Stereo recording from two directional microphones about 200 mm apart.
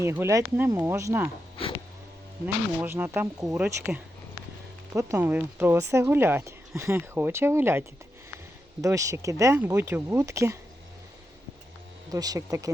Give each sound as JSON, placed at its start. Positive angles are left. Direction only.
{"t": 0.0, "sound": "speech", "side_deg": -10}
{"t": 2.8, "sound": "speech", "side_deg": -10}
{"t": 12.1, "sound": "speech", "side_deg": -20}